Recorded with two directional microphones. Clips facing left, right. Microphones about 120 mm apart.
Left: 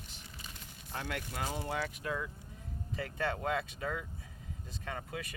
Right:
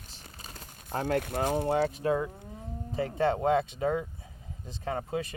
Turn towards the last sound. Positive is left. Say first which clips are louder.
# right 9 dB
turn(degrees=-30)  # may be behind; listen again after turning